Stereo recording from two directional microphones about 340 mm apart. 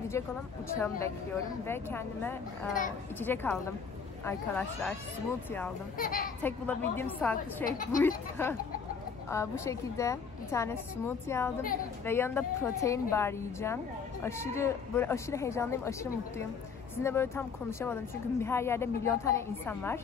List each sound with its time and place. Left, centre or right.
0.7 s a woman's voice: centre
5.9 s a woman's voice: left
6.4 s a woman's voice: centre
7.6 s a woman's voice: left
8.4 s a woman's voice: centre